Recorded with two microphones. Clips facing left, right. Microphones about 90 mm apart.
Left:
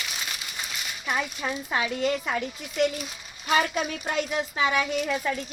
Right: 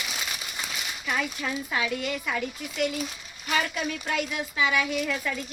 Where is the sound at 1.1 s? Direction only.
25° left (ahead or behind).